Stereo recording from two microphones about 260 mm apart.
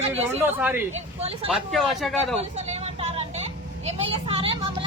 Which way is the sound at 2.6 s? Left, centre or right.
Right.